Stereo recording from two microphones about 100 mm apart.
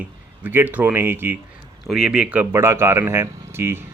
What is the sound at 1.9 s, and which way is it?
Speech, 10° right (ahead or behind).